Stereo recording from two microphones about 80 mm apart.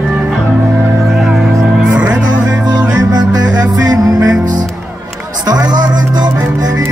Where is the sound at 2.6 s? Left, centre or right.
Right.